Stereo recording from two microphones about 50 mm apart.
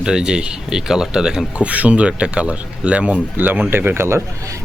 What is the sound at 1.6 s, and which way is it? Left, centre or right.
Speech, right.